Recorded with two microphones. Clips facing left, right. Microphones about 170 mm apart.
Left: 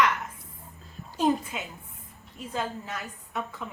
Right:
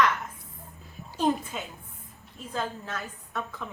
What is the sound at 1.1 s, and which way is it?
A woman's voice, 5° left (ahead or behind).